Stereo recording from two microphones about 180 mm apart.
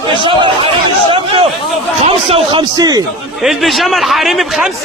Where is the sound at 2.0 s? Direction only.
30° right (ahead or behind).